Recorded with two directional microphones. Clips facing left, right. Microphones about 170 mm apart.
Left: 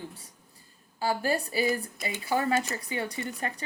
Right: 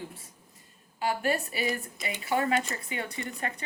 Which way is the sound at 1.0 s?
30° left (ahead or behind).